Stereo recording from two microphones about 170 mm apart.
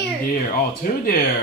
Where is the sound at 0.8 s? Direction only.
60° left (ahead or behind).